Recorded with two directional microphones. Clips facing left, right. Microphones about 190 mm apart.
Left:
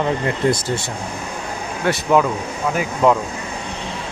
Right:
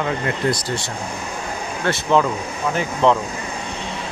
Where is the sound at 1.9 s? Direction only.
10° left (ahead or behind).